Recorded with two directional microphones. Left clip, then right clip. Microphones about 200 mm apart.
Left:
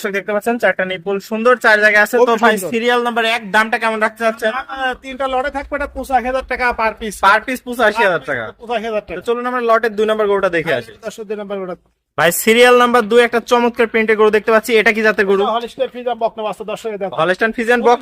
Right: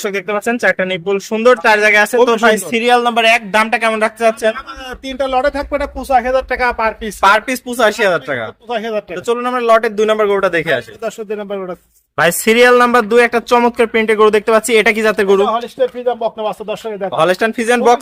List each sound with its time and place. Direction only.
0.0 s a man's voice: 5° right (ahead or behind)
4.8 s speech: 45° right (ahead or behind)
6.0 s a man's voice: 20° right (ahead or behind)
6.3 s a man's voice: 5° right (ahead or behind)
15.4 s a man's voice: 20° right (ahead or behind)
16.0 s speech: 5° right (ahead or behind)